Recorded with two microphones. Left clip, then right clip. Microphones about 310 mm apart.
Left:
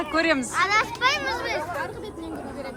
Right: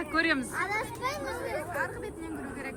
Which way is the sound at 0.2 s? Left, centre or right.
Centre.